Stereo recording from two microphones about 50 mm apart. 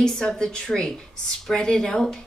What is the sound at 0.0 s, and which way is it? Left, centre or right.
Speech, centre.